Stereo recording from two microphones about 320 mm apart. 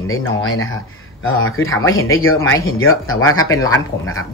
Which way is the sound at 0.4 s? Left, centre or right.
Left.